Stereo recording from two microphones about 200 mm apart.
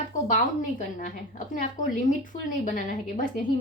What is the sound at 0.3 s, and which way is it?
A woman's voice, 40° left (ahead or behind).